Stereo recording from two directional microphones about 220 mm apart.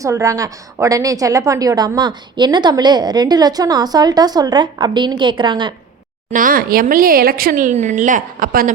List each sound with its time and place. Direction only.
0.0 s a woman's voice: 15° right (ahead or behind)
6.3 s speech: 40° right (ahead or behind)